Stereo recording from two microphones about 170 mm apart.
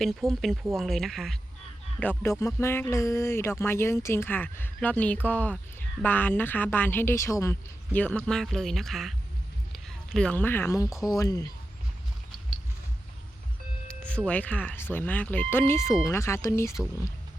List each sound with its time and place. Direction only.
0.0 s speech: centre (ahead or behind); by 11.4 s 20° left (ahead or behind)
13.8 s speech: 5° left (ahead or behind)